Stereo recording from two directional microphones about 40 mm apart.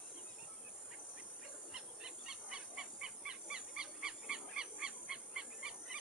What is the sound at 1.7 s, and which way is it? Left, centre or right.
Bird, centre.